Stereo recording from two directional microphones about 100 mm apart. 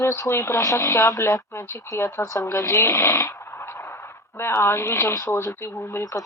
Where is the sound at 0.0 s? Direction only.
25° left (ahead or behind).